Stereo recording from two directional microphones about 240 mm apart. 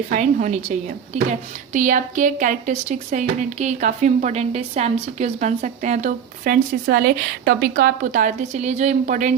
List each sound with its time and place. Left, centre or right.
0.1 s speech: right